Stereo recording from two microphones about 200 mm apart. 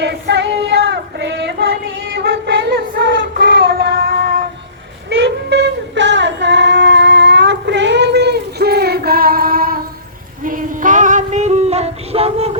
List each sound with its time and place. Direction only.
0.0 s child singing: 60° right (ahead or behind)
5.0 s child singing: 60° right (ahead or behind)
10.4 s female singing: 40° right (ahead or behind)